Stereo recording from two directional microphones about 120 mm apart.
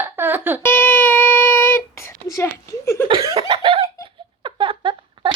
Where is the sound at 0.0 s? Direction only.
15° right (ahead or behind).